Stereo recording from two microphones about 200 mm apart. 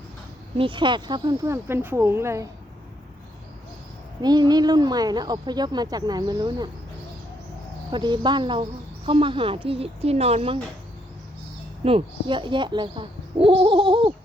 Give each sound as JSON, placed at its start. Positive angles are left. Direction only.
{"t": 0.5, "sound": "speech", "side_deg": -25}
{"t": 4.2, "sound": "speech", "side_deg": -20}
{"t": 7.9, "sound": "speech", "side_deg": -25}
{"t": 11.8, "sound": "speech", "side_deg": -30}